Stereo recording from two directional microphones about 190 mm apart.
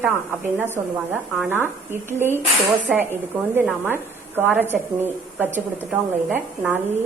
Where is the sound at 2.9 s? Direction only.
10° right (ahead or behind).